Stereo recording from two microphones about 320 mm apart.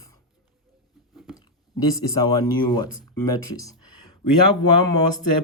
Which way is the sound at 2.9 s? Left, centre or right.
Left.